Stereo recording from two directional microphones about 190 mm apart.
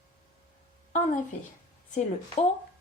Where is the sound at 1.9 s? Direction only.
35° left (ahead or behind).